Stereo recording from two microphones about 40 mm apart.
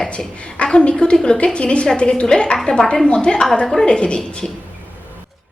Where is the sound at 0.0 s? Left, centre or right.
Left.